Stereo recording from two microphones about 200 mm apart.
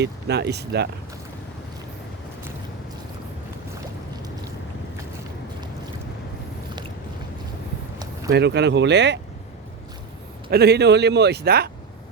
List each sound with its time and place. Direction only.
0.0 s speech: 55° right (ahead or behind)
8.3 s speech: 55° right (ahead or behind)
10.5 s speech: 55° right (ahead or behind)